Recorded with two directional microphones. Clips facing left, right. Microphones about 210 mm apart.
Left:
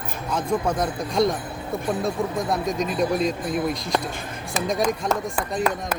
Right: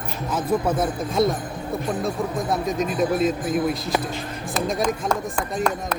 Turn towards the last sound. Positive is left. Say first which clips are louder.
# even
turn(degrees=5)  # may be behind; listen again after turning